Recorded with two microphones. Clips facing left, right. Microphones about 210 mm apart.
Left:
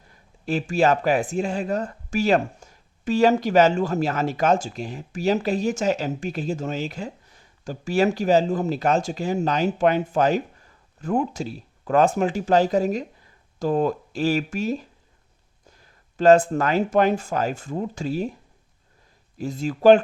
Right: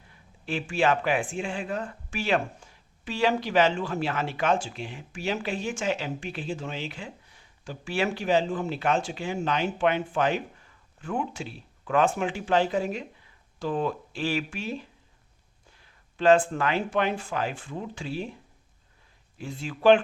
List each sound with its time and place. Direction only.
0.1 s speech: 40° left (ahead or behind)
19.4 s speech: 40° left (ahead or behind)